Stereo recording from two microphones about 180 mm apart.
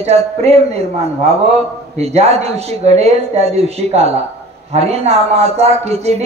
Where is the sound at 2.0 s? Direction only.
35° right (ahead or behind).